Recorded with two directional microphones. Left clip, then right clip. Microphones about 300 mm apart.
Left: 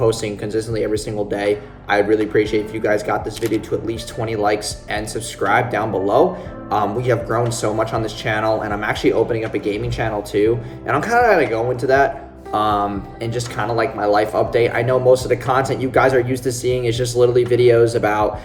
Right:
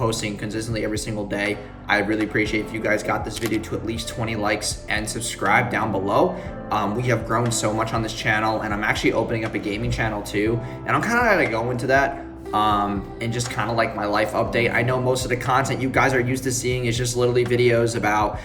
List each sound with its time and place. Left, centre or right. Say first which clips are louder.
0.1 s speech: left 6 dB; centre